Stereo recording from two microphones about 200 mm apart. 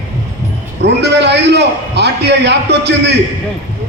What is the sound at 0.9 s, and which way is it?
A man's voice, 60° right (ahead or behind).